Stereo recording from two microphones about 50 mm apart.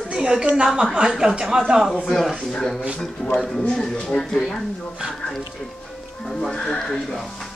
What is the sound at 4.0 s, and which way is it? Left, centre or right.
Speech, centre.